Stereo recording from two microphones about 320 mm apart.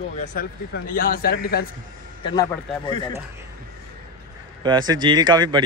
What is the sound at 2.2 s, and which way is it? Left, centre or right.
Speech, centre.